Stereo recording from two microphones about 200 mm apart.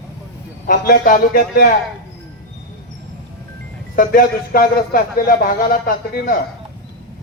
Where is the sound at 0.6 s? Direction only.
50° left (ahead or behind).